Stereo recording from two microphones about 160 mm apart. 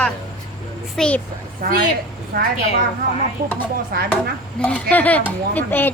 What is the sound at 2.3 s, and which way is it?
Speech, 60° right (ahead or behind).